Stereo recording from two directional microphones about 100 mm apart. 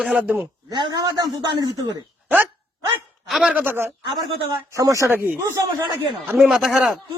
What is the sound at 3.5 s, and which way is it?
Speech, 20° right (ahead or behind).